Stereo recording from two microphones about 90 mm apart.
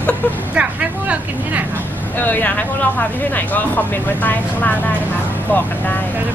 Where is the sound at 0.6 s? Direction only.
10° right (ahead or behind).